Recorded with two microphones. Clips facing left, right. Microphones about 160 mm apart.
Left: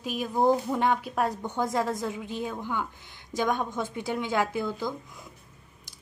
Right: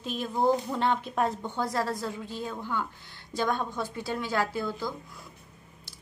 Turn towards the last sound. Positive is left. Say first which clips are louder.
# left 2 dB
turn(degrees=20)  # may be behind; listen again after turning